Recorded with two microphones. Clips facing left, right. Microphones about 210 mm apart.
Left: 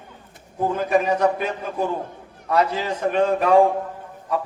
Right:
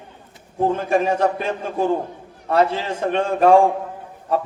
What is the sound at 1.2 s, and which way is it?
A man's voice, 30° right (ahead or behind).